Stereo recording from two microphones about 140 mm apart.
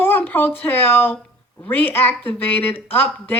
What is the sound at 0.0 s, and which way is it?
A woman's voice, 15° left (ahead or behind).